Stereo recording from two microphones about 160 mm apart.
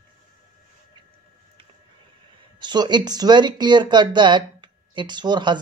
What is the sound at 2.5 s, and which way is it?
Speech, 30° right (ahead or behind).